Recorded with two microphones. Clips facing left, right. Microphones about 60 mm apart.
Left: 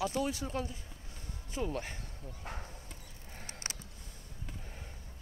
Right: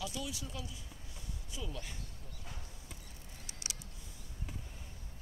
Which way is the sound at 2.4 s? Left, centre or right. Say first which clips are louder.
Left 7 dB; left.